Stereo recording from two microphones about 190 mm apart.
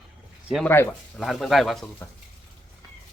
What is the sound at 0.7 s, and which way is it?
Speech, 15° left (ahead or behind).